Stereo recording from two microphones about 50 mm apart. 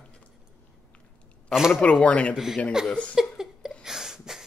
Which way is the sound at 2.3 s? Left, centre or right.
Centre.